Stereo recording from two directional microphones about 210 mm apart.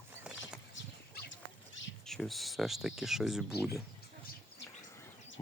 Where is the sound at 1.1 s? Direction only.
50° left (ahead or behind).